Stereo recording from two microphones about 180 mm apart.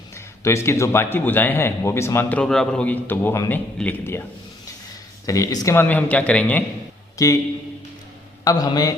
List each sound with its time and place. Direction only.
0.1 s speech: 15° left (ahead or behind)
7.2 s a man's voice: 20° left (ahead or behind)
8.4 s a man's voice: 20° left (ahead or behind)